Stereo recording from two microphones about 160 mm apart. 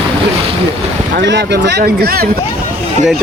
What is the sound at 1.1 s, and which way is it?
Speech, 90° right.